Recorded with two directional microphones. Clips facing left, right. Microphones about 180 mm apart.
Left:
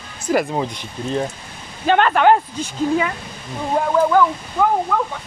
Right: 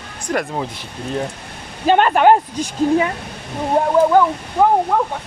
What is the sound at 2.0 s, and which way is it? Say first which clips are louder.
Speech: right 1 dB; 20° right (ahead or behind).